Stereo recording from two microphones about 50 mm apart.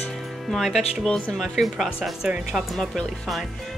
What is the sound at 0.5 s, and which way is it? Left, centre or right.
Speech, centre.